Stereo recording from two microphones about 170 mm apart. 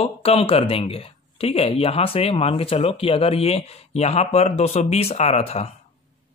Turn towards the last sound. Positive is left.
turn(degrees=35)  # may be behind; listen again after turning